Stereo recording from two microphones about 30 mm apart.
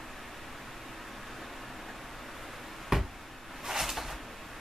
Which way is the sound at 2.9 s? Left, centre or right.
Centre.